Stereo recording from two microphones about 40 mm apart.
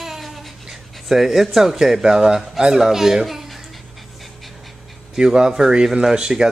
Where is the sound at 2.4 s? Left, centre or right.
Centre.